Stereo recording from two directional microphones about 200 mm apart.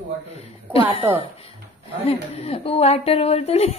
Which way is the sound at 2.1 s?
30° left (ahead or behind).